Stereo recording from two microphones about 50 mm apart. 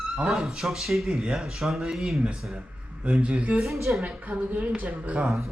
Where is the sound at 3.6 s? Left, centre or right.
Centre.